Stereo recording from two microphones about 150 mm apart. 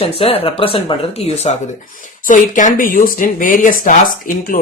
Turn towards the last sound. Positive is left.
turn(degrees=65)  # may be behind; listen again after turning